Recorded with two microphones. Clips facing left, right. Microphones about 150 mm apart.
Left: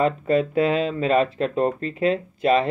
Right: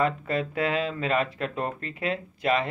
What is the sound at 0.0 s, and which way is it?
Speech, 25° left (ahead or behind).